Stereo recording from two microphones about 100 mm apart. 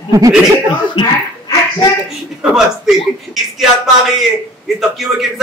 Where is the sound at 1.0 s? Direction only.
60° left (ahead or behind).